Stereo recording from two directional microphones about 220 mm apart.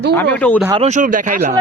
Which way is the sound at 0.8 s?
30° right (ahead or behind).